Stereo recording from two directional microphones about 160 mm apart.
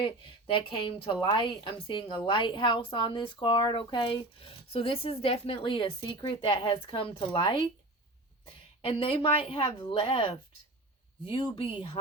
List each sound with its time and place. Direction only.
0.0 s a woman's voice: 35° left (ahead or behind)
8.8 s a woman's voice: 35° left (ahead or behind)